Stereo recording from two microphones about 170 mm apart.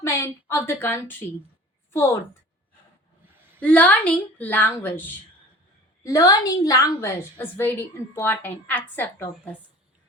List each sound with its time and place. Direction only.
0.0 s a woman's voice: 15° left (ahead or behind)
3.6 s a woman's voice: 10° left (ahead or behind)